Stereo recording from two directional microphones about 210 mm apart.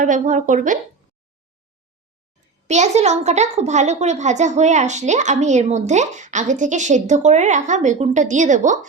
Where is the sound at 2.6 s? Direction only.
35° right (ahead or behind).